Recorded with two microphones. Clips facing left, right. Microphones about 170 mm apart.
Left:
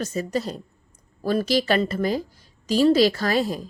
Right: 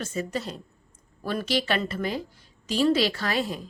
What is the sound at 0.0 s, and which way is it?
Speech, 40° left (ahead or behind).